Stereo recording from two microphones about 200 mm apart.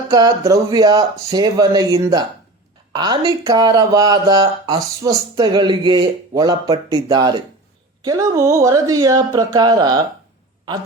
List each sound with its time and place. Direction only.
0.1 s speech: 20° right (ahead or behind)